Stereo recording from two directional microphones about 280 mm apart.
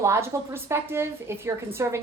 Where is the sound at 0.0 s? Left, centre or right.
Centre.